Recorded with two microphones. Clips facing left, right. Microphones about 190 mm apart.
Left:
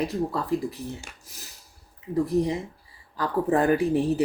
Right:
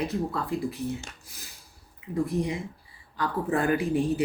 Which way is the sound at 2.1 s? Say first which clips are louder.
Left 4 dB; 40° left (ahead or behind).